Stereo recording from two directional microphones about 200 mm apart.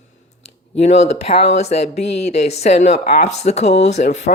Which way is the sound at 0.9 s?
35° left (ahead or behind).